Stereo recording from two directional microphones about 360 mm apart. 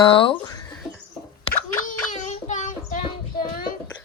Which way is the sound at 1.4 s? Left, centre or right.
Left.